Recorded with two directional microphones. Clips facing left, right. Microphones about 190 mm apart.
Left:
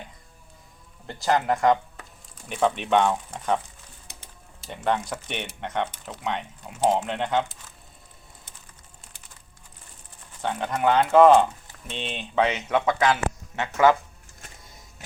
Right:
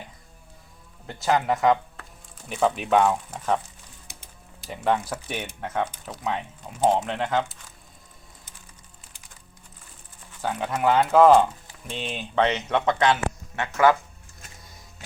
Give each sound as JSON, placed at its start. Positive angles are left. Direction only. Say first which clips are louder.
{"t": 1.0, "sound": "speech", "louder": "even", "side_deg": 0}
{"t": 4.6, "sound": "speech", "louder": "right 1 dB", "side_deg": 0}
{"t": 10.4, "sound": "speech", "louder": "even", "side_deg": -5}
{"t": 13.6, "sound": "speech", "louder": "even", "side_deg": 20}